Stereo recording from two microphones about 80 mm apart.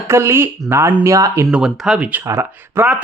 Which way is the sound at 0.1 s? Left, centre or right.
Right.